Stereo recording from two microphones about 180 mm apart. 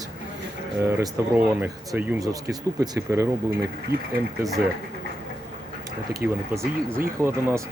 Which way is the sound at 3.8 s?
60° right (ahead or behind).